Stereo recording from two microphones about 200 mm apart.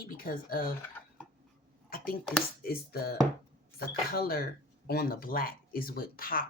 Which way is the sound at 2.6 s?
50° left (ahead or behind).